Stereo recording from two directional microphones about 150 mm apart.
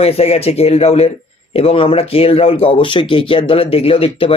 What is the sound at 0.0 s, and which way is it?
Speech, 45° left (ahead or behind).